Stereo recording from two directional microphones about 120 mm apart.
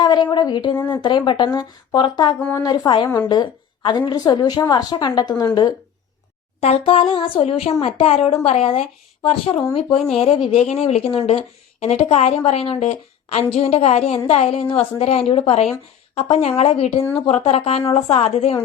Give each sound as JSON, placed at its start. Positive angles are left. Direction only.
{"t": 0.0, "sound": "a woman's voice", "side_deg": 35}
{"t": 6.6, "sound": "speech", "side_deg": 55}